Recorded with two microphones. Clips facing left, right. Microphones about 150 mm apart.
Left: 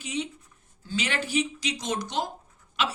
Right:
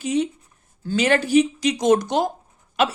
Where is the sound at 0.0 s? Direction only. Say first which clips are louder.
Right 10 dB; 45° right (ahead or behind).